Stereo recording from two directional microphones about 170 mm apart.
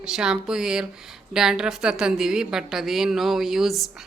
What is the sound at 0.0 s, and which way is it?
A woman's voice, 5° right (ahead or behind).